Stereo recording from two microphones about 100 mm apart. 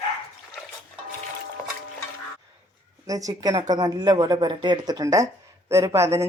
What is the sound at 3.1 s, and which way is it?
A woman's voice, 35° right (ahead or behind).